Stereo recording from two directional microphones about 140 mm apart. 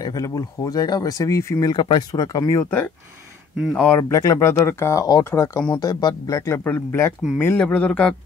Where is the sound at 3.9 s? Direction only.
20° left (ahead or behind).